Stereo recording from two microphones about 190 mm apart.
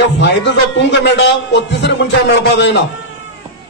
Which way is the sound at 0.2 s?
65° left (ahead or behind).